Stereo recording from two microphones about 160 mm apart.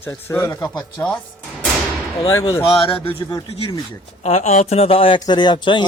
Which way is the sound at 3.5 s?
35° left (ahead or behind).